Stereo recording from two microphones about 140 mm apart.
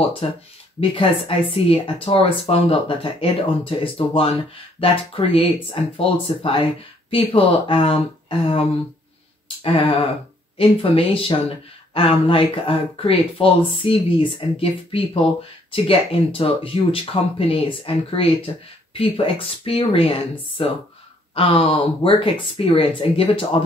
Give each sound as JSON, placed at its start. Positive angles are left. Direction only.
{"t": 0.2, "sound": "speech", "side_deg": 40}